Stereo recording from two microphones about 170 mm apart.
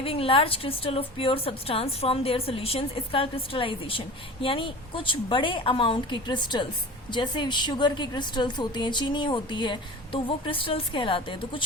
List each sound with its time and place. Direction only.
0.0 s a woman's voice: 35° left (ahead or behind)